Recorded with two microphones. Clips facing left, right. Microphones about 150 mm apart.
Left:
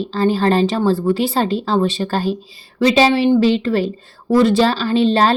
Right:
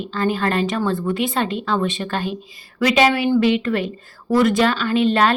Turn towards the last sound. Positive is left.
turn(degrees=30)  # may be behind; listen again after turning